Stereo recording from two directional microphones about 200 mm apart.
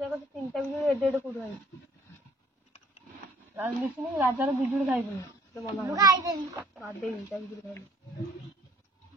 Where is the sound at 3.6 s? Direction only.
10° right (ahead or behind).